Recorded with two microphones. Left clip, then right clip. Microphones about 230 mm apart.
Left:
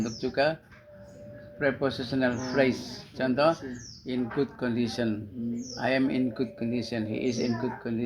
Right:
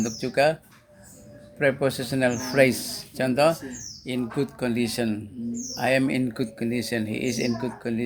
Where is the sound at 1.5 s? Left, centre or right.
Right.